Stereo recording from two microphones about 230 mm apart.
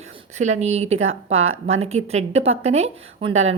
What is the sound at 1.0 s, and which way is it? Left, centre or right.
Speech, right.